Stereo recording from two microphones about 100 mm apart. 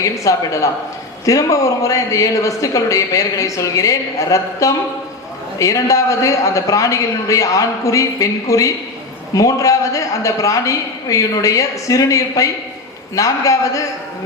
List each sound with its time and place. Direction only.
0.0 s speech: 30° left (ahead or behind)